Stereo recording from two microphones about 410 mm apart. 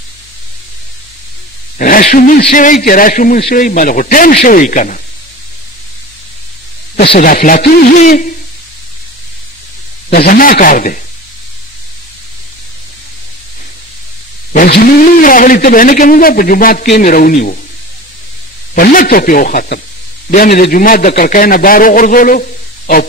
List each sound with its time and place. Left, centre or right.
1.8 s a man's voice: centre
7.0 s a man's voice: centre
10.0 s a man's voice: left
14.5 s a man's voice: left
18.8 s a man's voice: left